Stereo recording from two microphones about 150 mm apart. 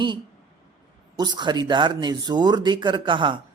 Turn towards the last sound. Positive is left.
turn(degrees=-35)  # may be behind; listen again after turning